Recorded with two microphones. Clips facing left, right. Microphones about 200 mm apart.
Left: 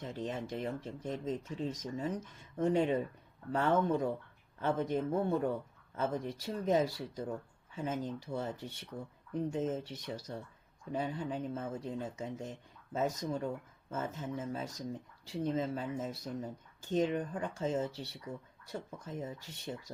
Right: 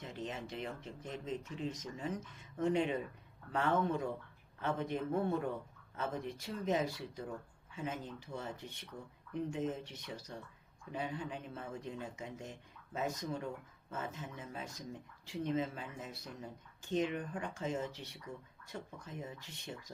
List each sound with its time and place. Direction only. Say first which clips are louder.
0.0 s speech: left 4 dB; 40° left (ahead or behind)